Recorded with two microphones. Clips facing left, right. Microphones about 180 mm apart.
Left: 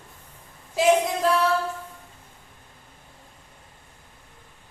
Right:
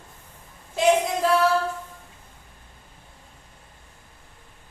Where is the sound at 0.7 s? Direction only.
Centre (ahead or behind).